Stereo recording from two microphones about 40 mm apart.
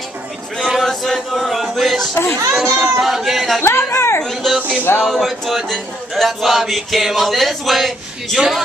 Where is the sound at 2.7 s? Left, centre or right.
Centre.